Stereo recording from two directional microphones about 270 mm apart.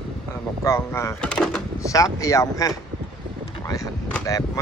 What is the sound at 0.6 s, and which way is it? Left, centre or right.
Speech, centre.